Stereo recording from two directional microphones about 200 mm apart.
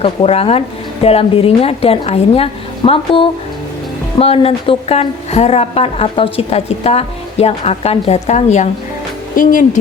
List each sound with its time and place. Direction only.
0.0 s a woman's voice: 30° left (ahead or behind)
4.2 s a woman's voice: 30° left (ahead or behind)